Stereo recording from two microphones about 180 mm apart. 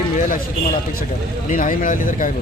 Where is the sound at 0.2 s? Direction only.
50° left (ahead or behind).